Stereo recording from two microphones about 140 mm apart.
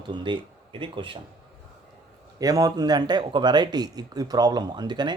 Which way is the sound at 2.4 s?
25° right (ahead or behind).